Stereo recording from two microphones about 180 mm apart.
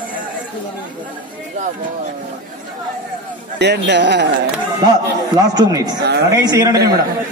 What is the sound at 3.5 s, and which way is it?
Speech, 70° right (ahead or behind).